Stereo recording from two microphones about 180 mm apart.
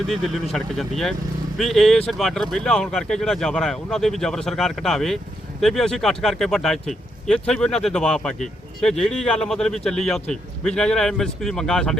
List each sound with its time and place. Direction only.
0.1 s speech: centre (ahead or behind)